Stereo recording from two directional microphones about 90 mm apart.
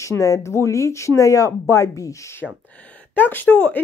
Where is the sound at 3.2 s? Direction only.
20° left (ahead or behind).